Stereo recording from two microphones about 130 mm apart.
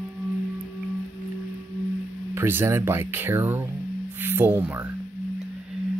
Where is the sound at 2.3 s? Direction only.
15° right (ahead or behind).